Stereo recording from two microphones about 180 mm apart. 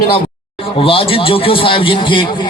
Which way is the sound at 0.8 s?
30° left (ahead or behind).